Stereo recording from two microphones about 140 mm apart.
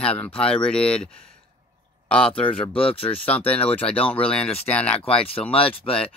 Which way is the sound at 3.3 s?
10° left (ahead or behind).